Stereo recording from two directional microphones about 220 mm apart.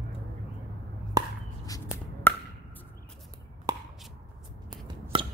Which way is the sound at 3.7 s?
15° right (ahead or behind).